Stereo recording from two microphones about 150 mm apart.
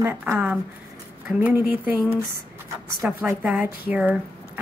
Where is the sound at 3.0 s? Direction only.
10° right (ahead or behind).